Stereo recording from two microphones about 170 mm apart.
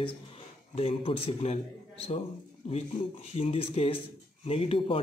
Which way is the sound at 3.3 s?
35° left (ahead or behind).